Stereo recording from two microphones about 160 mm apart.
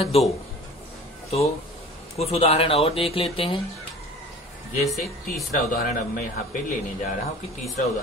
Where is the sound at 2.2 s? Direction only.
40° left (ahead or behind).